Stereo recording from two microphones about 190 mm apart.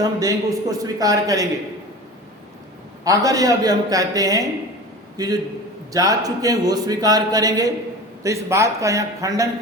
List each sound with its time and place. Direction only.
0.0 s a man's voice: 20° right (ahead or behind)
3.0 s a man's voice: 20° right (ahead or behind)